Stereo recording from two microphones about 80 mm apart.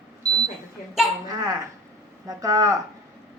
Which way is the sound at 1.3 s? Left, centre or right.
Right.